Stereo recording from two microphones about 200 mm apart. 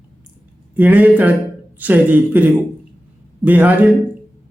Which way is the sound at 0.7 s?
10° right (ahead or behind).